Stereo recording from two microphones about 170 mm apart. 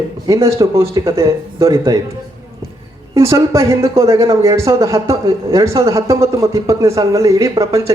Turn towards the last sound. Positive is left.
turn(degrees=-15)  # may be behind; listen again after turning